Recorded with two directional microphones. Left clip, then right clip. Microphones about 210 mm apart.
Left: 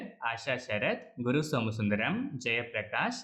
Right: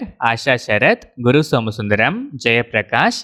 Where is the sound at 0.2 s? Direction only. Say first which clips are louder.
Right 17 dB; 45° right (ahead or behind).